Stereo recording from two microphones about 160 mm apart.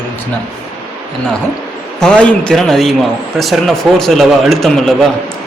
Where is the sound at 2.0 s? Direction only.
5° left (ahead or behind).